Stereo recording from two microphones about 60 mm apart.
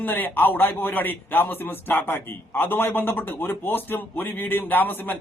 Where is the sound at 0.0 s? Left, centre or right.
Left.